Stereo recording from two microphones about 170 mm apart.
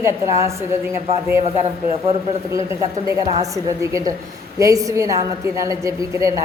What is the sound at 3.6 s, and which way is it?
A woman's voice, 20° right (ahead or behind).